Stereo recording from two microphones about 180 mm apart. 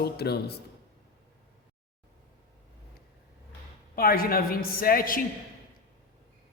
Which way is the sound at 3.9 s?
55° left (ahead or behind).